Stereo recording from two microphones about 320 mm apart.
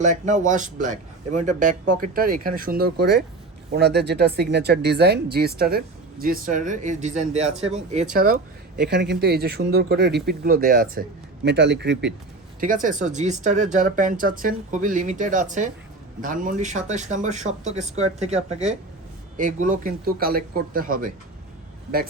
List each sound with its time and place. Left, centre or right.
0.0 s speech: right